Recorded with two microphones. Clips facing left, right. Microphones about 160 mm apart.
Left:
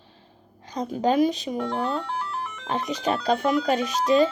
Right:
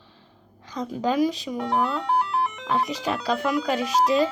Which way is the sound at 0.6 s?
45° left (ahead or behind).